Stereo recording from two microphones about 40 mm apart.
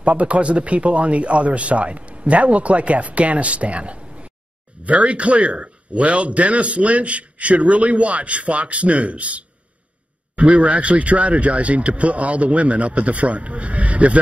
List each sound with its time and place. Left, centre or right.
0.0 s a man's voice: right